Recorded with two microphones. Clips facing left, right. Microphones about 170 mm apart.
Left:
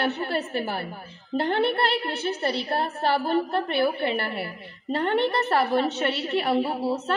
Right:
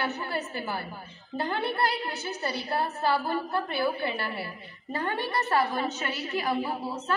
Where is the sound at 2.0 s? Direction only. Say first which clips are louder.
Left 6 dB; 30° left (ahead or behind).